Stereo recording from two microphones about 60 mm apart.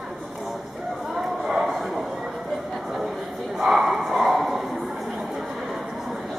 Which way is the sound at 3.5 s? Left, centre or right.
Centre.